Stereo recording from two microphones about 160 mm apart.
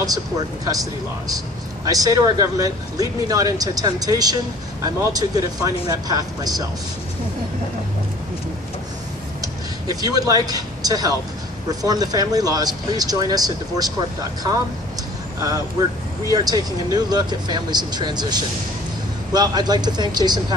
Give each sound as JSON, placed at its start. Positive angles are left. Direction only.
{"t": 1.9, "sound": "speech", "side_deg": -20}
{"t": 9.4, "sound": "a sound", "side_deg": -20}
{"t": 11.8, "sound": "speech", "side_deg": -25}
{"t": 16.3, "sound": "speech", "side_deg": -25}